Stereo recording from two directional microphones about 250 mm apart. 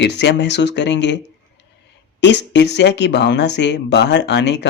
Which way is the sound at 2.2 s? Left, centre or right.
Left.